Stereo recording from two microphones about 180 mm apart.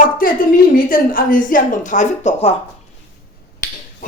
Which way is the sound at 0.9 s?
50° left (ahead or behind).